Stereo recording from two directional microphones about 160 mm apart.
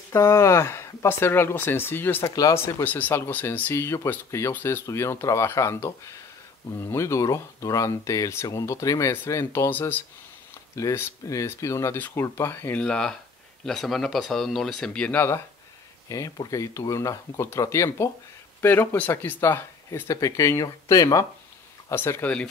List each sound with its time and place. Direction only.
0.1 s speech: 20° left (ahead or behind)